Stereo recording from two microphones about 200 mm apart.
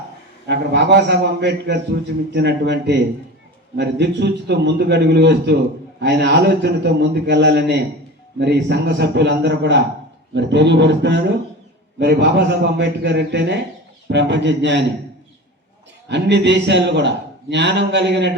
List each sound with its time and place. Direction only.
0.4 s a man's voice: 55° right (ahead or behind)
16.0 s a man's voice: 60° right (ahead or behind)